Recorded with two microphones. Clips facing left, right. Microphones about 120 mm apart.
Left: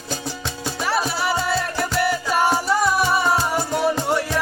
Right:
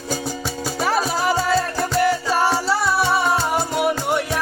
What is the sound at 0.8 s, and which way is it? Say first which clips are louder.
Music: right 2 dB; 40° right (ahead or behind).